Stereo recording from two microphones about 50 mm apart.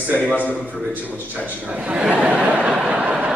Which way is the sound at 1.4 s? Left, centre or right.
Right.